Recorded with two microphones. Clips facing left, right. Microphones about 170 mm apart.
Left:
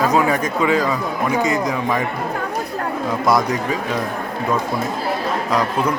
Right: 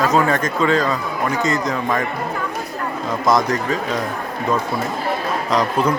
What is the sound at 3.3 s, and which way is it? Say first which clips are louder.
Speech: right 1 dB; 10° left (ahead or behind).